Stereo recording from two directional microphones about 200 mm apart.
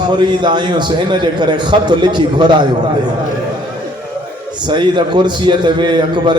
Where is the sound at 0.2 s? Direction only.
20° right (ahead or behind).